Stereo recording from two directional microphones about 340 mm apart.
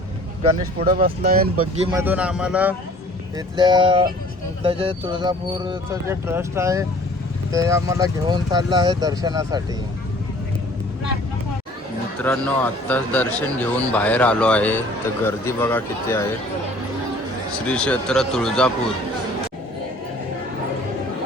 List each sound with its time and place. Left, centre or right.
0.8 s speech: right
2.0 s speech: centre
12.2 s speech: centre
17.7 s speech: centre